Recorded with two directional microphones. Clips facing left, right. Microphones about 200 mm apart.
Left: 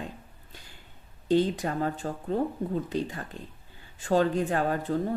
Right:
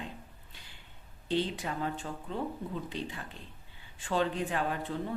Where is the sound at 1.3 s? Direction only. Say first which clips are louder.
Left 7 dB; 45° left (ahead or behind).